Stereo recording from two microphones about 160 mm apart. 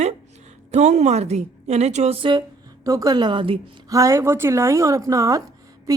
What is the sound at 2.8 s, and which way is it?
Speech, 20° right (ahead or behind).